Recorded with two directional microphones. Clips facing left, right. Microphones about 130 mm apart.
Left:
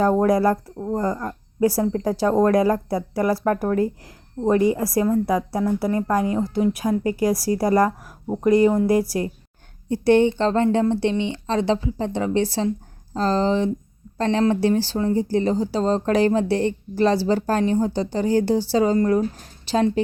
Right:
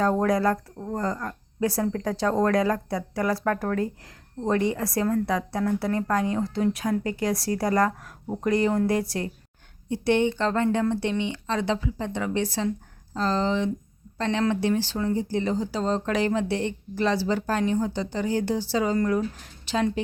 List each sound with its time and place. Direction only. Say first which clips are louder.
0.0 s speech: left 4 dB; 25° left (ahead or behind)
5.0 s a woman's voice: left 4 dB; 15° left (ahead or behind)
9.9 s speech: left 6 dB; 40° left (ahead or behind)